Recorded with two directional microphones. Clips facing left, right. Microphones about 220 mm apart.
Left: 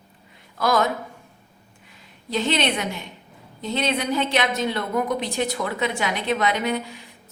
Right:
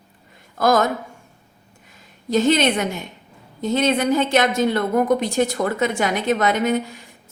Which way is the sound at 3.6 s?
45° right (ahead or behind).